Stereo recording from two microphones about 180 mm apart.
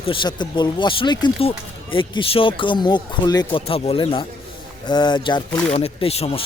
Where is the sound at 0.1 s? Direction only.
25° left (ahead or behind).